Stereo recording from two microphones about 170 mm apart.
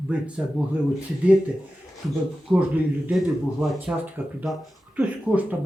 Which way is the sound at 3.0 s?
5° right (ahead or behind).